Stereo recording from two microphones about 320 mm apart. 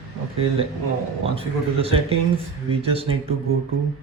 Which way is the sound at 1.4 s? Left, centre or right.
Centre.